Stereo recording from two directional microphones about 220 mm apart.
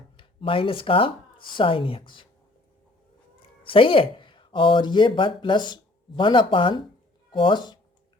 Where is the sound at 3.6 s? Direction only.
25° left (ahead or behind).